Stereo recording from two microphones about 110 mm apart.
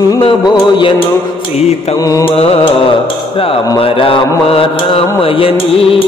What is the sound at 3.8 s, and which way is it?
Mantra, 55° left (ahead or behind).